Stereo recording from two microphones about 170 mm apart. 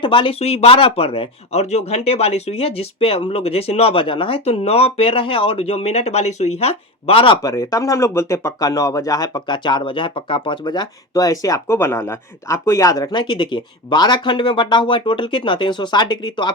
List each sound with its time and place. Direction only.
0.0 s speech: 30° left (ahead or behind)
7.4 s speech: 20° left (ahead or behind)